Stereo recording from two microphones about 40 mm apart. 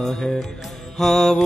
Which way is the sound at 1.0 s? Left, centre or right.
Centre.